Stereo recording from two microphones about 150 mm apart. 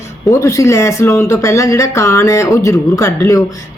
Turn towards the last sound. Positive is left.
turn(degrees=20)  # may be behind; listen again after turning